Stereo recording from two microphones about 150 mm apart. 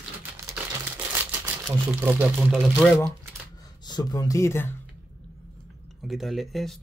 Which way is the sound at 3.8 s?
25° left (ahead or behind).